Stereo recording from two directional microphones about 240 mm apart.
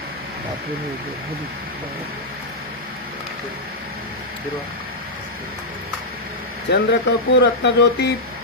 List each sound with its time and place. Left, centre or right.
6.7 s speech: left